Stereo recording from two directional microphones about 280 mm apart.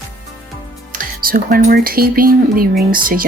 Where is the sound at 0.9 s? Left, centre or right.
Right.